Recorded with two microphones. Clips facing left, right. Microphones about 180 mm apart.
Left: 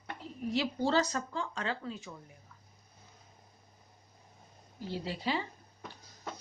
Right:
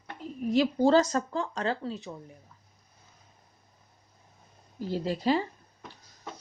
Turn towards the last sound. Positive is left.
turn(degrees=-45)  # may be behind; listen again after turning